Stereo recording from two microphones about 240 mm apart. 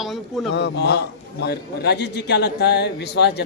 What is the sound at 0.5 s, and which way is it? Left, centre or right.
A man's voice, left.